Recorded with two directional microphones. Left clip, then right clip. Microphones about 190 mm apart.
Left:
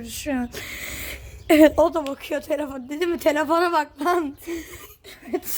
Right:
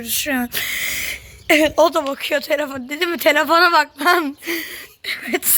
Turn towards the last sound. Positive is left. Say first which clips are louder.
# right 7 dB
turn(degrees=-20)  # may be behind; listen again after turning